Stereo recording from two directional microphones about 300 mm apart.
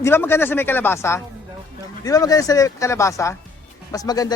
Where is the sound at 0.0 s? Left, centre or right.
Centre.